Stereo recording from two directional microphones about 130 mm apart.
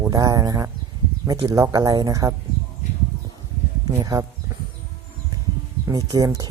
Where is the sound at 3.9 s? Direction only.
25° right (ahead or behind).